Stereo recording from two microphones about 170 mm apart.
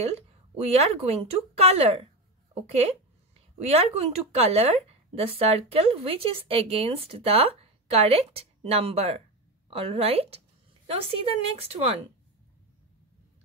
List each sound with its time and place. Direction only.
0.0 s speech: 35° right (ahead or behind)
3.5 s speech: 35° right (ahead or behind)